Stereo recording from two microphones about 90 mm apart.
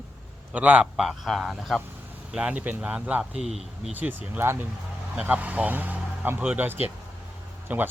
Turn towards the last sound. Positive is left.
turn(degrees=-20)  # may be behind; listen again after turning